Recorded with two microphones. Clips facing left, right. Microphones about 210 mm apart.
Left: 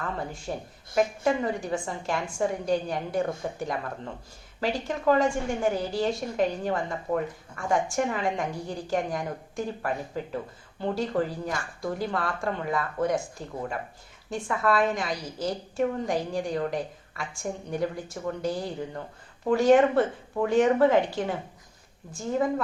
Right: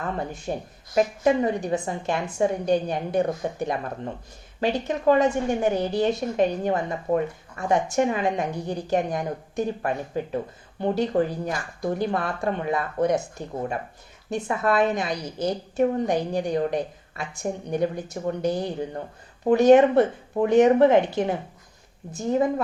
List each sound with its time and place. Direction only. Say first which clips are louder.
0.5 s a woman's voice: right 4 dB; 25° right (ahead or behind)